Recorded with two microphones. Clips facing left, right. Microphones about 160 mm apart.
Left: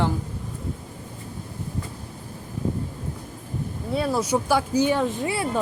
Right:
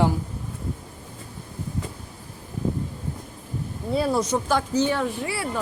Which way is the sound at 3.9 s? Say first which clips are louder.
Right 1 dB; centre (ahead or behind).